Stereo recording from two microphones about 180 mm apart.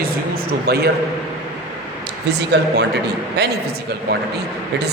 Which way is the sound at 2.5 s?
75° right (ahead or behind).